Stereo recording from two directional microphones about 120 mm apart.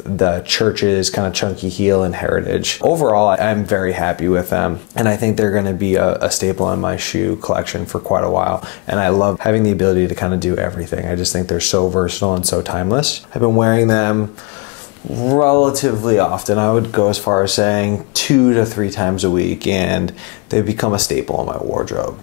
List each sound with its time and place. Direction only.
0.2 s speech: 15° left (ahead or behind)
6.2 s speech: 10° left (ahead or behind)
6.6 s speech: 20° left (ahead or behind)
15.4 s speech: 15° left (ahead or behind)
21.3 s speech: 25° left (ahead or behind)